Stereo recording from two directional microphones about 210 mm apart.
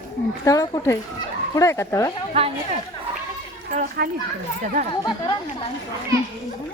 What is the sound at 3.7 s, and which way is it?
Speech, 35° right (ahead or behind).